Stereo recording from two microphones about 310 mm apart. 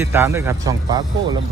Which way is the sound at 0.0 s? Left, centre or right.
Centre.